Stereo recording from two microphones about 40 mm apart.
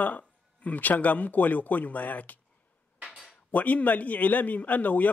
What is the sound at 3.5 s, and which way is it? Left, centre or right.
Speech, left.